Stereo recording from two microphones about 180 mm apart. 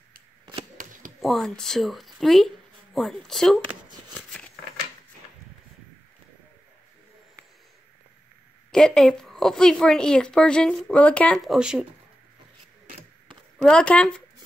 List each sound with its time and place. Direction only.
0.8 s a sound: 45° right (ahead or behind)
1.2 s speech: centre (ahead or behind)
4.2 s scissors: 5° left (ahead or behind)
8.7 s a woman's voice: 5° left (ahead or behind)
13.6 s a woman's voice: 5° left (ahead or behind)